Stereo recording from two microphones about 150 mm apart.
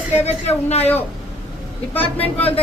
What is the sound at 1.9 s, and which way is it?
Speech, 10° left (ahead or behind).